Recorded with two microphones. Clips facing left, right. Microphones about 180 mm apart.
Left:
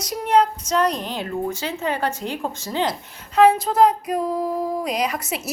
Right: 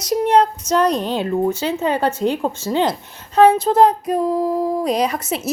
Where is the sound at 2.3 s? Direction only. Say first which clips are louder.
Right 6 dB; 20° right (ahead or behind).